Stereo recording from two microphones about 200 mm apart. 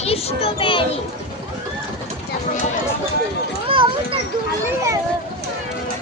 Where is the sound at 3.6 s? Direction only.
25° right (ahead or behind).